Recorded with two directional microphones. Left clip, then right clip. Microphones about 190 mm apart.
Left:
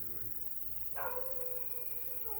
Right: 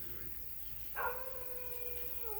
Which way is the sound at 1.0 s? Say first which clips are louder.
Right 3 dB; 70° left (ahead or behind).